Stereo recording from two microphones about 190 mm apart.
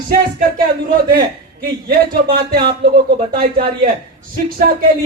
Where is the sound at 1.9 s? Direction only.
55° right (ahead or behind).